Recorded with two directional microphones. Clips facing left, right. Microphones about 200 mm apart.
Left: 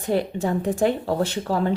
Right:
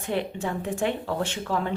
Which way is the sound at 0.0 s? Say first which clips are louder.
Left 5 dB; 40° left (ahead or behind).